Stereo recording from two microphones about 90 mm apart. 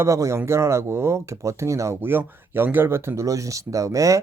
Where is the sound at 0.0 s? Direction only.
35° right (ahead or behind).